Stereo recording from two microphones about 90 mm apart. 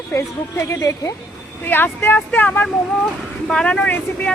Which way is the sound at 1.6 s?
25° left (ahead or behind).